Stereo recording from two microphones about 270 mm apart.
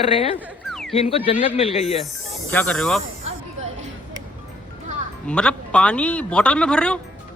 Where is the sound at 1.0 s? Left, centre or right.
Left.